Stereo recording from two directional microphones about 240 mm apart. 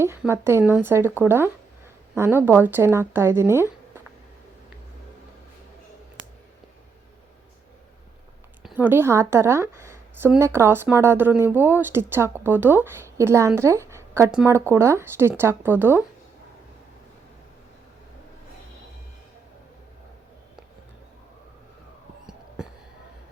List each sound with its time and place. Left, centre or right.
0.0 s speech: centre
8.6 s speech: centre
22.3 s a sound: centre